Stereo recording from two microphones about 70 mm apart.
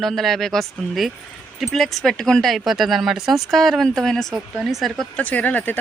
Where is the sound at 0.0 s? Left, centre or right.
Centre.